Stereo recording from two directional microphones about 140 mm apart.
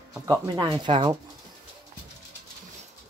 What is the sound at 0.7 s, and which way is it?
Speech, 40° right (ahead or behind).